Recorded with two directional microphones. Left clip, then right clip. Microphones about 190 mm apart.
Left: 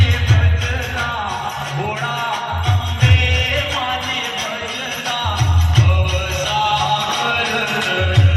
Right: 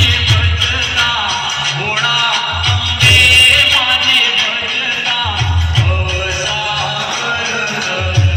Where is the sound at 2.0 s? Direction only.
45° left (ahead or behind); by 4.5 s 70° left (ahead or behind).